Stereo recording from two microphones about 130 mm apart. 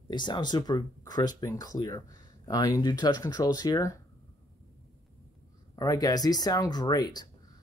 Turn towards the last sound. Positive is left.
turn(degrees=30)  # may be behind; listen again after turning